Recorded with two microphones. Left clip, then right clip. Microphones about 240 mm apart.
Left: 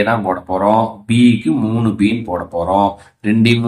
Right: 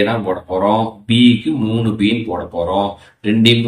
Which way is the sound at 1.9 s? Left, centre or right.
Centre.